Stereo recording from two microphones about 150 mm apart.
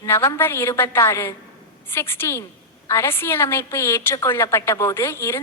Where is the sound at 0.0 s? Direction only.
20° left (ahead or behind).